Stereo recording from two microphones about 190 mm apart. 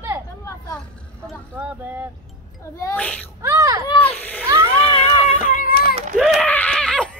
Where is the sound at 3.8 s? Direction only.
30° left (ahead or behind).